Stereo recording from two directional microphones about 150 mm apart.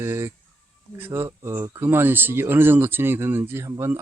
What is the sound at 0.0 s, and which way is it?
Speech, 15° right (ahead or behind).